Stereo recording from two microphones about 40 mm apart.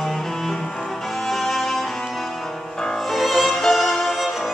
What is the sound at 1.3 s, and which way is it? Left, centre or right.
Music, centre.